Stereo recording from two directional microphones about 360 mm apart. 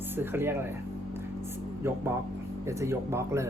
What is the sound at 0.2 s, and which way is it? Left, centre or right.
Speech, centre.